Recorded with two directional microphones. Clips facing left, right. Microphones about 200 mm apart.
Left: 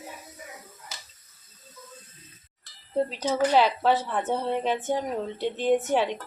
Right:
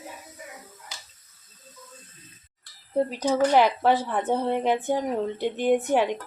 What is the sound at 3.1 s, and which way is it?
A woman's voice, 10° right (ahead or behind).